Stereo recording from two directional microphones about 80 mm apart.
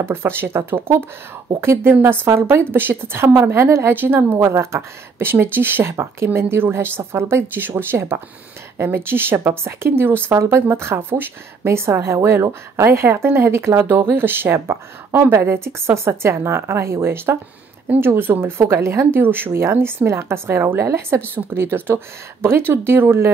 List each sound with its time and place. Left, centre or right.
0.0 s a woman's voice: right